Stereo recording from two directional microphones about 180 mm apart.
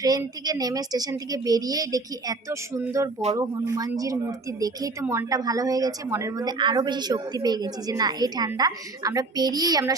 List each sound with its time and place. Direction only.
0.0 s speech: 20° right (ahead or behind)